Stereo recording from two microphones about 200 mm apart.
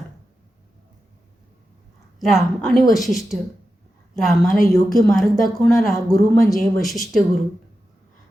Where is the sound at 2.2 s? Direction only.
Centre (ahead or behind).